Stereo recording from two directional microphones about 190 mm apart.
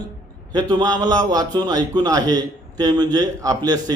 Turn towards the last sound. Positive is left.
turn(degrees=-20)  # may be behind; listen again after turning